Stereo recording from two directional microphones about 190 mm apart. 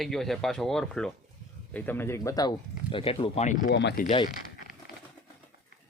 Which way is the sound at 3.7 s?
65° left (ahead or behind).